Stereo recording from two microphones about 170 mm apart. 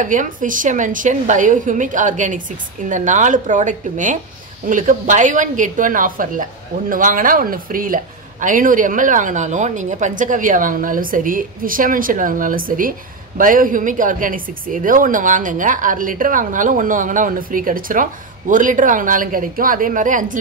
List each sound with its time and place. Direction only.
0.0 s speech: 50° right (ahead or behind)